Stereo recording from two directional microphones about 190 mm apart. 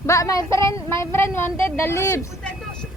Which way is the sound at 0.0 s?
15° left (ahead or behind).